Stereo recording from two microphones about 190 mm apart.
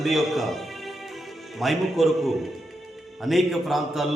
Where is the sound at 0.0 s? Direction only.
Centre (ahead or behind).